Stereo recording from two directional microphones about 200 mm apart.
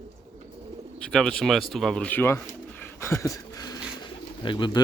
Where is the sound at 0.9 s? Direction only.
5° left (ahead or behind).